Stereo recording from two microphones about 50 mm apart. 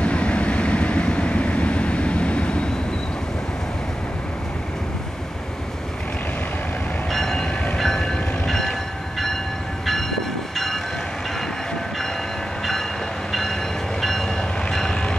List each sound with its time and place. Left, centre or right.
0.0 s vehicle: left
7.1 s train: centre
10.5 s train: centre
13.3 s train: centre